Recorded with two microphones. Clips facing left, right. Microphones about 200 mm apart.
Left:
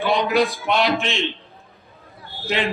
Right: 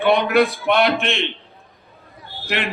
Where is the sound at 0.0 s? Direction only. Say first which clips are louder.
Right 3 dB; 60° right (ahead or behind).